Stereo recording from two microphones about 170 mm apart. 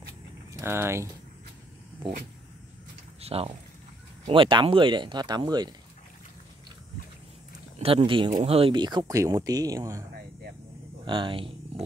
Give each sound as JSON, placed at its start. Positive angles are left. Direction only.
{"t": 0.5, "sound": "speech", "side_deg": -15}
{"t": 3.2, "sound": "speech", "side_deg": -35}
{"t": 7.8, "sound": "speech", "side_deg": -30}
{"t": 11.1, "sound": "speech", "side_deg": -30}